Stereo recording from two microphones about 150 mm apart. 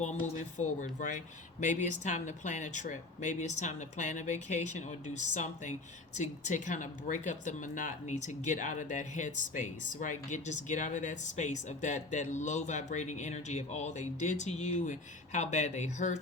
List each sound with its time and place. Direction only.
0.0 s speech: 55° left (ahead or behind)